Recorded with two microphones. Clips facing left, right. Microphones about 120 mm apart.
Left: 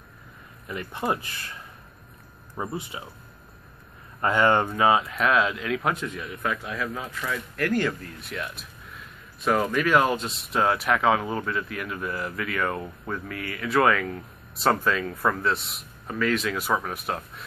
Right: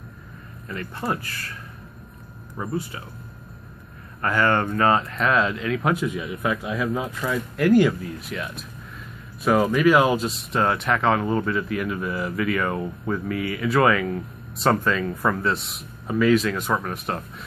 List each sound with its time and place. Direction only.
0.7 s speech: 15° left (ahead or behind)
4.2 s speech: 20° left (ahead or behind); by 17.2 s centre (ahead or behind)